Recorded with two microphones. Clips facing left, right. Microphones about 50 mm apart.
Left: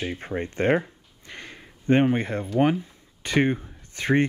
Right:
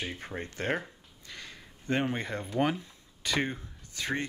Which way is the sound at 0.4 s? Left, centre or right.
Left.